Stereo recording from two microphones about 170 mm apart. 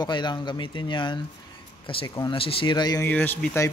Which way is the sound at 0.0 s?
25° left (ahead or behind).